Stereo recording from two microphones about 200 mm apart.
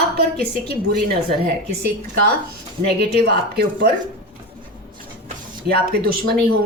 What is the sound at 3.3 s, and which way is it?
Speech, 50° right (ahead or behind).